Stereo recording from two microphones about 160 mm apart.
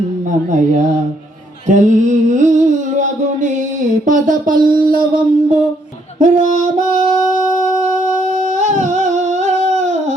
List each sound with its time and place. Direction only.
1.6 s a sound: 50° right (ahead or behind)
6.1 s child singing: 50° right (ahead or behind)
8.5 s humming: 45° right (ahead or behind)